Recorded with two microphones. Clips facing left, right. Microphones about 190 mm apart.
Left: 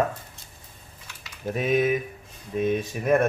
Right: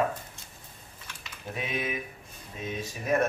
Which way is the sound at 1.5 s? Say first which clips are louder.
Left 11 dB; 45° left (ahead or behind).